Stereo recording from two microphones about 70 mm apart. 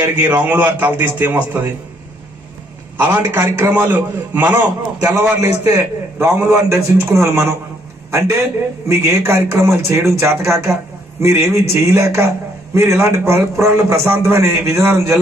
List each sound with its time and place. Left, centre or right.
0.1 s a man's voice: right
3.0 s a man's voice: right